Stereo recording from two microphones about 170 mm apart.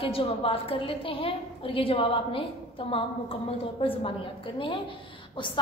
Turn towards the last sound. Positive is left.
turn(degrees=30)  # may be behind; listen again after turning